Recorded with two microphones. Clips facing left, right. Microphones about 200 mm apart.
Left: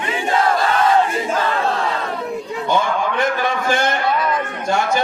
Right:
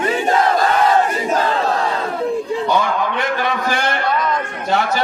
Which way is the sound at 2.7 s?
50° left (ahead or behind).